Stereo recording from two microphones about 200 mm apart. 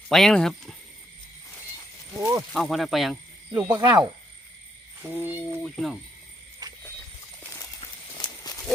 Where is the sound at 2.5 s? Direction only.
Centre (ahead or behind).